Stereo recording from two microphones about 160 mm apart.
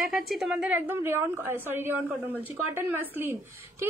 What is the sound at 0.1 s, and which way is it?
A woman's voice, centre (ahead or behind).